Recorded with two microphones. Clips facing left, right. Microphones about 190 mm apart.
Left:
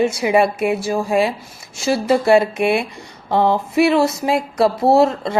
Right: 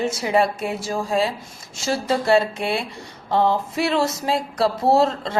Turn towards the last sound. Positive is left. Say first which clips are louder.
# left 4 dB
turn(degrees=15)  # may be behind; listen again after turning